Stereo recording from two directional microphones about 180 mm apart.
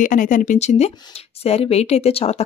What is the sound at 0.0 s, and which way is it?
Speech, 45° left (ahead or behind).